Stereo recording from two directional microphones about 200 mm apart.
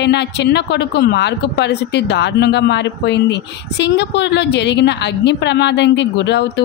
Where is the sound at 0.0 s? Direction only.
60° left (ahead or behind).